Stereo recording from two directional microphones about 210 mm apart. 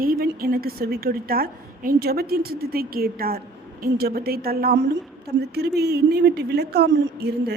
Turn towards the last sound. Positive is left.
turn(degrees=-50)  # may be behind; listen again after turning